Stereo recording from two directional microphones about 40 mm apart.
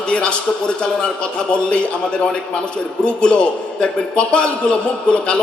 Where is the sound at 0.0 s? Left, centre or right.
Left.